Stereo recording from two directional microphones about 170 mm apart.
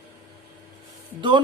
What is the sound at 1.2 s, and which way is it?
Speech, 30° right (ahead or behind).